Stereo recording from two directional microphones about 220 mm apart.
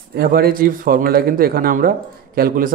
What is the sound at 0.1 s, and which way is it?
Speech, 45° right (ahead or behind).